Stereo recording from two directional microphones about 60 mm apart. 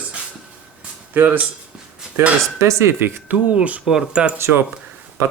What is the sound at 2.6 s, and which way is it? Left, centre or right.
Speech, right.